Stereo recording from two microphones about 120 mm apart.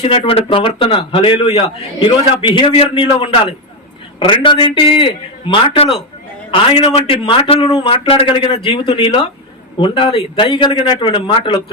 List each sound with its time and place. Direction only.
0.0 s a man's voice: 50° left (ahead or behind)